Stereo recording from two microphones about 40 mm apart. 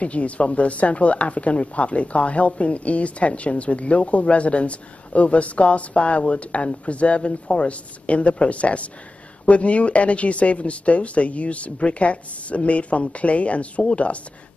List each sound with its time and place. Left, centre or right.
0.0 s speech: left